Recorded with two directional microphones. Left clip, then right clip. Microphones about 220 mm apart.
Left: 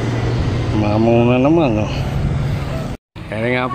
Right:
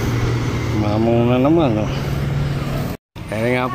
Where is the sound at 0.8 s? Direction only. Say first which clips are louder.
Left 3 dB; 10° left (ahead or behind).